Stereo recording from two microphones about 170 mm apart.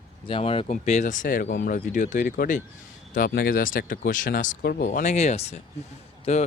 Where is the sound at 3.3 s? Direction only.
65° left (ahead or behind).